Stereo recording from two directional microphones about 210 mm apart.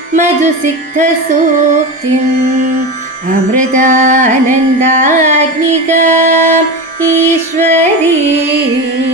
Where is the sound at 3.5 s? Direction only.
40° right (ahead or behind).